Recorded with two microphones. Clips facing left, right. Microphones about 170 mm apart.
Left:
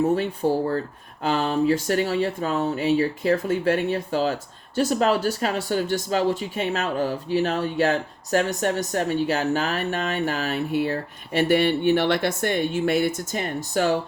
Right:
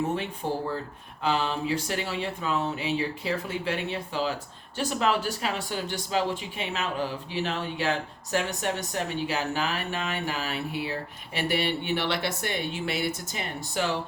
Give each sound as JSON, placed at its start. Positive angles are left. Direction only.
{"t": 1.2, "sound": "speech", "side_deg": 45}